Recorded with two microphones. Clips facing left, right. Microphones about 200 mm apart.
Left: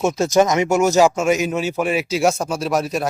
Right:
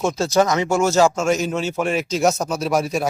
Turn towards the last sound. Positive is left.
turn(degrees=0)  # may be behind; listen again after turning